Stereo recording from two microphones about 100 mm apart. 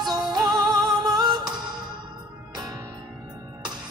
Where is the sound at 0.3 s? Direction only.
45° right (ahead or behind).